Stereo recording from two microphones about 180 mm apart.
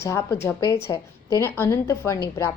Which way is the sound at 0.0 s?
15° left (ahead or behind).